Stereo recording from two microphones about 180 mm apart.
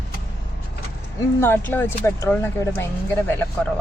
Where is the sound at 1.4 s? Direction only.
10° left (ahead or behind).